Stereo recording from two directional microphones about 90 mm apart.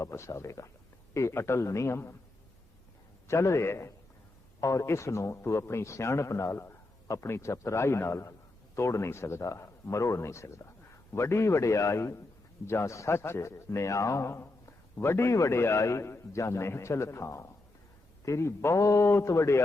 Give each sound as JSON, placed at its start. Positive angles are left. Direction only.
{"t": 0.0, "sound": "a man's voice", "side_deg": 35}
{"t": 3.2, "sound": "a man's voice", "side_deg": 30}